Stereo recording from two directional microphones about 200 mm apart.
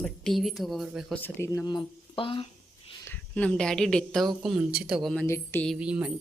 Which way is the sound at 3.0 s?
10° left (ahead or behind).